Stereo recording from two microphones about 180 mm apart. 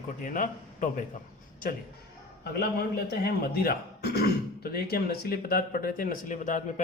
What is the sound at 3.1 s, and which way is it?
Speech, 60° left (ahead or behind).